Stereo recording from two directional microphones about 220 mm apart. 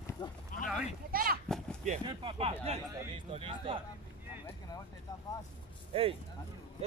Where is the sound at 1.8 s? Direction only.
25° right (ahead or behind).